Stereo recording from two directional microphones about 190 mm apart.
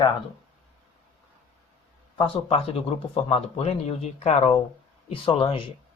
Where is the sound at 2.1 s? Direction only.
25° left (ahead or behind).